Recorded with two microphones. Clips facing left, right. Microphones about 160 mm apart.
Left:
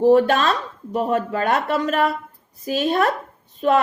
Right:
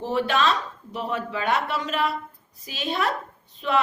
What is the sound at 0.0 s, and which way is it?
A woman's voice, 50° left (ahead or behind).